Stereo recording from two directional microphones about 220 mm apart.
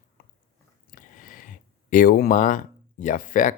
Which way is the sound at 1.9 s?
40° left (ahead or behind).